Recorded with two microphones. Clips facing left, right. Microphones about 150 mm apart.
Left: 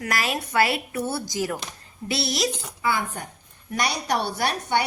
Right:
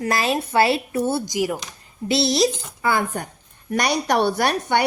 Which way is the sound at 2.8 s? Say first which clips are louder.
Right 4 dB; 50° right (ahead or behind).